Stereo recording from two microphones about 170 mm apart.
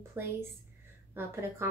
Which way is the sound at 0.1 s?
15° right (ahead or behind).